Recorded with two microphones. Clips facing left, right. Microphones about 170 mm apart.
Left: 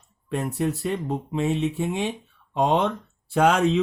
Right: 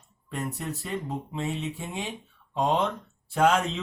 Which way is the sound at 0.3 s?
70° left (ahead or behind).